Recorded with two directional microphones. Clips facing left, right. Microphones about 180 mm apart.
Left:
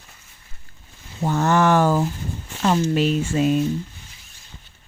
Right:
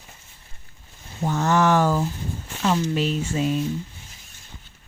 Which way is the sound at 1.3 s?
50° left (ahead or behind).